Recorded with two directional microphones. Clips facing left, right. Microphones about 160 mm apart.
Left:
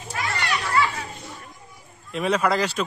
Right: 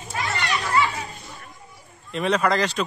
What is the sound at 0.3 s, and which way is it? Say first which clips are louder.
Children playing: right 1 dB; 20° right (ahead or behind).